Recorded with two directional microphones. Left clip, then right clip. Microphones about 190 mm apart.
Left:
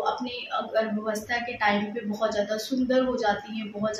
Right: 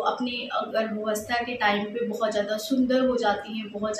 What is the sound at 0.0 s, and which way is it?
A woman's voice, 5° right (ahead or behind).